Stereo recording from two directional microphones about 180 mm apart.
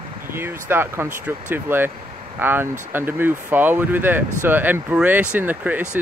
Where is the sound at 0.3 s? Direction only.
15° right (ahead or behind).